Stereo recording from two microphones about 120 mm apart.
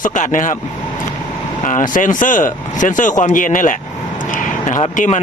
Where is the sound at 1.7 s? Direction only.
90° left.